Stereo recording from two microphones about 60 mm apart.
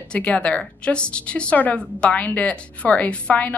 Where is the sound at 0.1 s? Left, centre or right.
Left.